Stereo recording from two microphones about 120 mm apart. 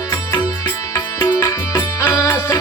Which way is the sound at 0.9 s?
25° left (ahead or behind).